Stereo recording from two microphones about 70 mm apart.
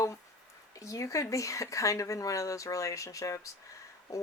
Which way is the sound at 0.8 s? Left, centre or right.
Left.